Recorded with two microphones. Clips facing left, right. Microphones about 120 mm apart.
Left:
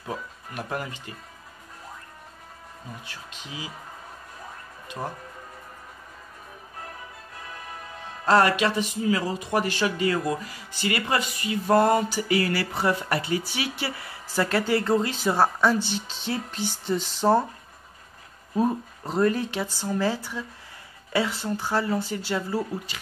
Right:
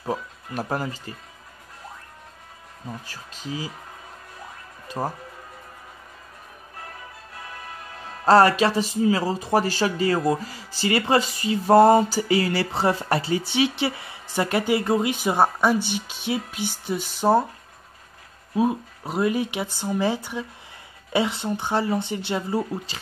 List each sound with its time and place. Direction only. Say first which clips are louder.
0.0 s speech: right 5 dB; 35° right (ahead or behind)
3.1 s speech: right 7 dB; 40° right (ahead or behind)
4.8 s music: right 5 dB; 35° right (ahead or behind)
8.3 s speech: right 4 dB; 35° right (ahead or behind); by 17.5 s 10° right (ahead or behind)
18.5 s speech: right 2 dB; 10° right (ahead or behind)